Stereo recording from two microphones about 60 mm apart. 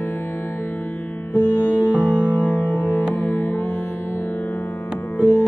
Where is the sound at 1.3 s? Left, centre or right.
Left.